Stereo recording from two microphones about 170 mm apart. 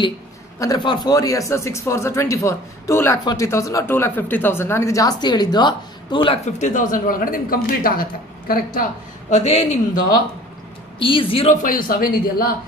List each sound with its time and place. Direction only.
0.6 s speech: 25° left (ahead or behind); by 8.8 s 60° left (ahead or behind)
9.3 s a man's voice: 45° left (ahead or behind)
11.0 s speech: 30° left (ahead or behind)
11.6 s speech: 55° left (ahead or behind)